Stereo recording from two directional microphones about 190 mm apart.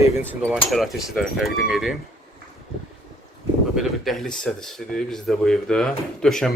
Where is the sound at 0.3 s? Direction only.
Centre (ahead or behind).